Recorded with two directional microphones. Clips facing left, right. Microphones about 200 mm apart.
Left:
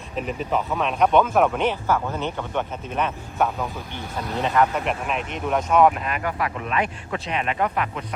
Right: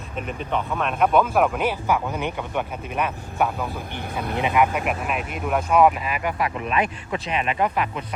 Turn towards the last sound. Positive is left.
turn(degrees=-10)  # may be behind; listen again after turning